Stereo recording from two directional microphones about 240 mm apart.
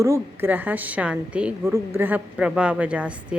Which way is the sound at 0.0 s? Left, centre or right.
Centre.